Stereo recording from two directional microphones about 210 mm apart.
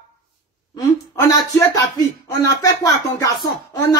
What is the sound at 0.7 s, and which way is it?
Speech, 15° left (ahead or behind).